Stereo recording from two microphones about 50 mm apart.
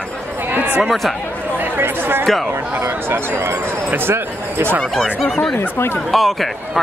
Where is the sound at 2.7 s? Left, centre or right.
Right.